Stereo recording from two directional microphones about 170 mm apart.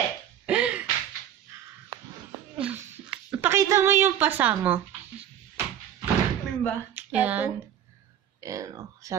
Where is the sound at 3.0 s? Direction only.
15° right (ahead or behind).